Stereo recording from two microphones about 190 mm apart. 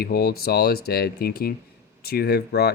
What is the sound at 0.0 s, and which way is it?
Speech, 55° left (ahead or behind).